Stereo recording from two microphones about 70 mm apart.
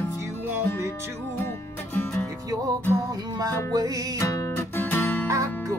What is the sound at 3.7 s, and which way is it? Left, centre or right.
Music, right.